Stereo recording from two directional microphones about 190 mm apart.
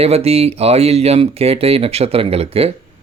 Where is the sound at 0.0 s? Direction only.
30° right (ahead or behind).